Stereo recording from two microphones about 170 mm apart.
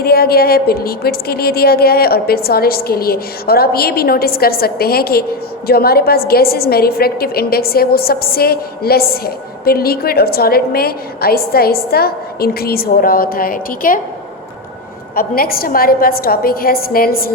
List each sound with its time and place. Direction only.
0.0 s a woman's voice: 65° left (ahead or behind)
15.1 s a woman's voice: 60° left (ahead or behind)